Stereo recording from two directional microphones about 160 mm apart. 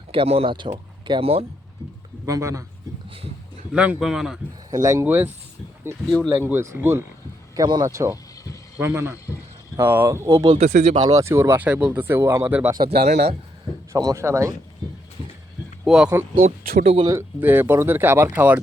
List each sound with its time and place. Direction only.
0.1 s speech: 35° right (ahead or behind)
2.2 s speech: 20° right (ahead or behind)
3.7 s speech: 5° right (ahead or behind)
4.8 s speech: 15° right (ahead or behind)
10.6 s speech: 55° right (ahead or behind)
10.9 s speech: 25° right (ahead or behind)
12.8 s a man's voice: 75° right (ahead or behind)
13.9 s speech: 20° right (ahead or behind)
15.8 s speech: centre (ahead or behind)
16.8 s speech: 35° right (ahead or behind)
17.1 s speech: 15° right (ahead or behind)